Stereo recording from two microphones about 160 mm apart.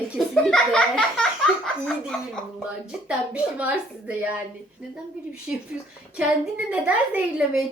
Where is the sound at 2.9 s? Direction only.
5° right (ahead or behind).